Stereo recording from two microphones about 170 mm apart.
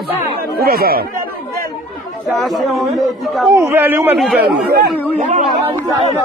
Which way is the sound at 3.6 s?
15° right (ahead or behind).